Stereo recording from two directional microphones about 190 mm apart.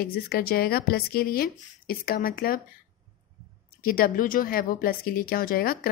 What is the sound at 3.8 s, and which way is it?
A woman's voice, 50° left (ahead or behind).